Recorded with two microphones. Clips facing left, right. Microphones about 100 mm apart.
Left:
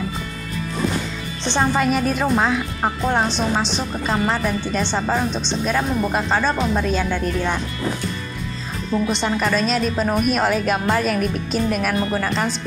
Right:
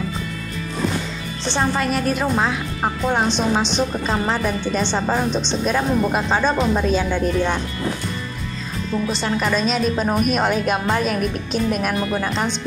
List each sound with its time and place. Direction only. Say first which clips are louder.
1.6 s speech: left 2 dB; 5° left (ahead or behind)
8.9 s a woman's voice: left 2 dB; 20° left (ahead or behind)
9.4 s speech: right 2 dB; centre (ahead or behind)